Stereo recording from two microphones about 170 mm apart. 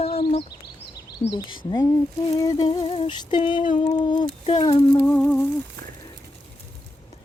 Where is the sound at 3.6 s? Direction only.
45° left (ahead or behind).